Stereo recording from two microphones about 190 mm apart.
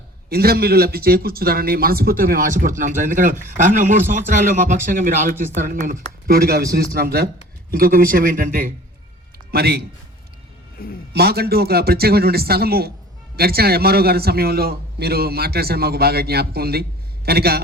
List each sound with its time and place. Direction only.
0.3 s a man's voice: 55° right (ahead or behind)
11.1 s a man's voice: 55° right (ahead or behind)